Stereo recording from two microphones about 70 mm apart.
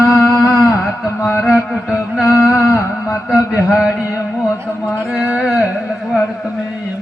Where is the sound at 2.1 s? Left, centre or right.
Centre.